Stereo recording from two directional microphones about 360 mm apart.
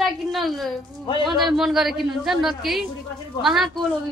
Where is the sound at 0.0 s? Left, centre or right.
Centre.